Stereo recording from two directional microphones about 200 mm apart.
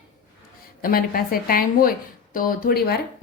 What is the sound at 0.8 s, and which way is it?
A woman's voice, 45° left (ahead or behind).